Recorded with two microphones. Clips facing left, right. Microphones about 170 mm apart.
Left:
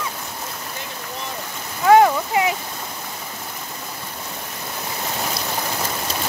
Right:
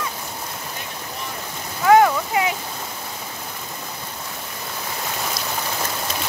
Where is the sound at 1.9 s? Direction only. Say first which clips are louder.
Left 1 dB; 25° left (ahead or behind).